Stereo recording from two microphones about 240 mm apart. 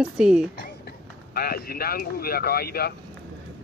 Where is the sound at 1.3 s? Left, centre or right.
Left.